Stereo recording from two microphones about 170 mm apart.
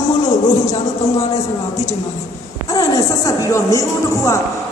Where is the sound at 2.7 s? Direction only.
20° left (ahead or behind).